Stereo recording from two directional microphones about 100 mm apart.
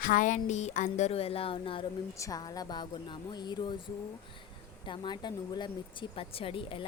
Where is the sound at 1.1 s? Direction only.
80° left; by 1.9 s 60° left (ahead or behind).